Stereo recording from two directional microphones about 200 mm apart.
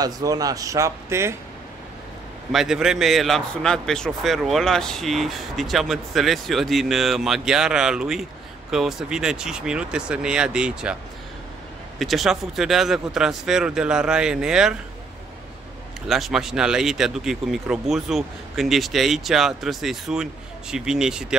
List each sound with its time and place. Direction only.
0.0 s speech: 20° right (ahead or behind)
2.5 s a man's voice: centre (ahead or behind)
12.0 s a man's voice: centre (ahead or behind)
16.1 s a man's voice: centre (ahead or behind)